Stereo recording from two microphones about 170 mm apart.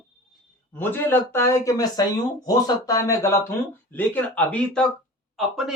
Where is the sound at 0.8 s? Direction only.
10° left (ahead or behind).